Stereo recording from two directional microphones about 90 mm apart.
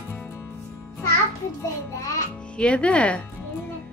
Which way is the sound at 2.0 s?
40° left (ahead or behind).